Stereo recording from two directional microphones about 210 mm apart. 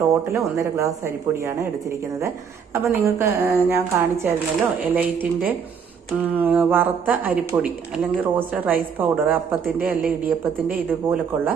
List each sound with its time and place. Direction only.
0.3 s speech: 15° right (ahead or behind)